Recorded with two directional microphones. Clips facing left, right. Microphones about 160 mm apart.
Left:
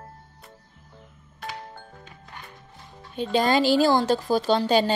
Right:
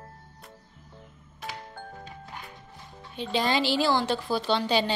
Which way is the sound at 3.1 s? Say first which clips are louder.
Left 5 dB; 45° left (ahead or behind).